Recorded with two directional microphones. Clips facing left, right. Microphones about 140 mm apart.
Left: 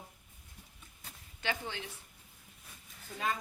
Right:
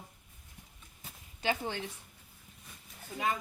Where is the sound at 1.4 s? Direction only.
40° right (ahead or behind).